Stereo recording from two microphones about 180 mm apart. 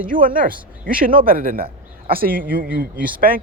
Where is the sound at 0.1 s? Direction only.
50° right (ahead or behind).